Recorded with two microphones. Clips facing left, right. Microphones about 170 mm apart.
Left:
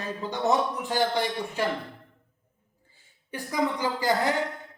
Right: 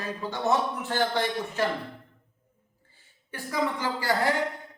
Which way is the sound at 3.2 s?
15° left (ahead or behind).